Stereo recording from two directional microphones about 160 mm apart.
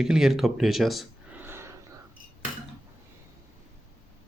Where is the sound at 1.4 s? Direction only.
15° right (ahead or behind).